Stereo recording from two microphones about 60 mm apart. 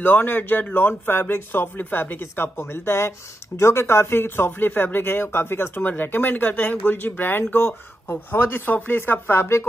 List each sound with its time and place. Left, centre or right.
0.0 s speech: left